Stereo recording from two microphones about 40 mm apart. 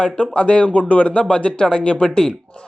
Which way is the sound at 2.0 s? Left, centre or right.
Centre.